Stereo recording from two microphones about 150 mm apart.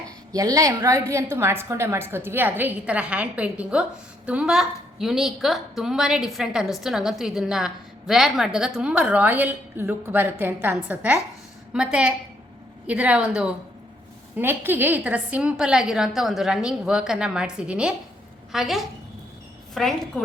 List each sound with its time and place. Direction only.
0.3 s a woman's voice: 25° right (ahead or behind); by 20.2 s centre (ahead or behind)